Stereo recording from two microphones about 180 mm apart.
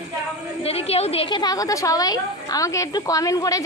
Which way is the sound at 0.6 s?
35° left (ahead or behind).